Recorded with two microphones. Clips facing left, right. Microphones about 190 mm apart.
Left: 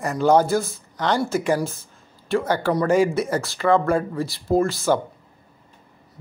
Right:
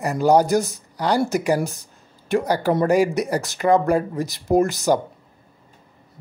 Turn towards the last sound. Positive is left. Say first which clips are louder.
# right 2 dB
turn(degrees=-20)  # may be behind; listen again after turning